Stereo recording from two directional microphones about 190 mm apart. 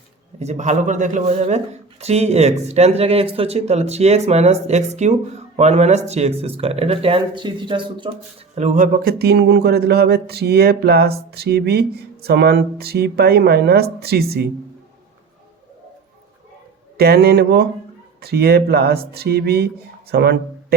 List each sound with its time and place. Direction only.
0.3 s speech: 35° right (ahead or behind)
8.5 s speech: 40° right (ahead or behind)
17.0 s speech: 55° right (ahead or behind)